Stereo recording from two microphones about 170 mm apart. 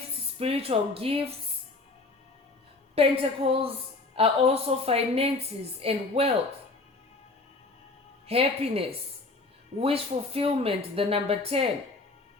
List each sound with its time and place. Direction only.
0.3 s a woman's voice: 35° right (ahead or behind)
2.9 s a woman's voice: 35° right (ahead or behind)
8.3 s a woman's voice: 35° right (ahead or behind)
9.8 s a woman's voice: 35° right (ahead or behind)